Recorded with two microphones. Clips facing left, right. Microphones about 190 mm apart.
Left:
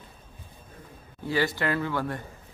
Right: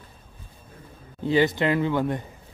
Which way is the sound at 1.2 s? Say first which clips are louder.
Right 6 dB; 20° right (ahead or behind).